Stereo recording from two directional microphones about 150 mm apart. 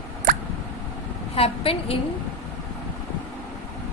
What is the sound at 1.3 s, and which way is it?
Speech, 40° left (ahead or behind).